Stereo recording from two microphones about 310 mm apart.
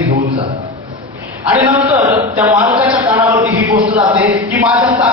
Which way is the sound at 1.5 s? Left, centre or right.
Centre.